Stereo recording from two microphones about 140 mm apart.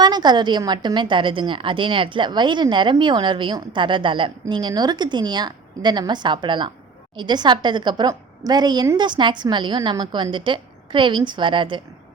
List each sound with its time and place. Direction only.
0.0 s a woman's voice: 30° right (ahead or behind)